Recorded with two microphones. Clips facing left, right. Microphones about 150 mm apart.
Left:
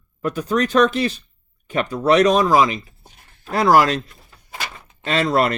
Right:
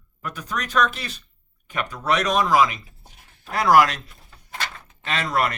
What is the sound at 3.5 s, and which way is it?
Speech, 30° left (ahead or behind).